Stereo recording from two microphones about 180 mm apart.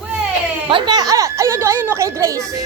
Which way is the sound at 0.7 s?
25° right (ahead or behind).